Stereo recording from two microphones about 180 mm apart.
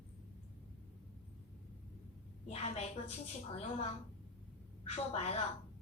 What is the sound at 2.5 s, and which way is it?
Speech, 35° left (ahead or behind).